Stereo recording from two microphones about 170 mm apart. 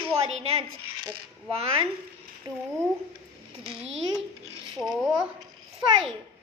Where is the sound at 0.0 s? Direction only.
35° right (ahead or behind).